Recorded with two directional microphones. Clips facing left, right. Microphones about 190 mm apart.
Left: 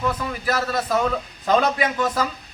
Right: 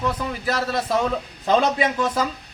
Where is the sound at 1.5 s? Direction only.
25° right (ahead or behind).